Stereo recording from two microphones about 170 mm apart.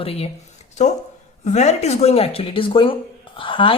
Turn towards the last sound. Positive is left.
turn(degrees=30)  # may be behind; listen again after turning